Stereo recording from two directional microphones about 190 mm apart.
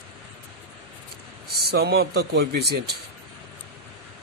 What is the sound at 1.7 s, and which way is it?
A man's voice, 55° right (ahead or behind).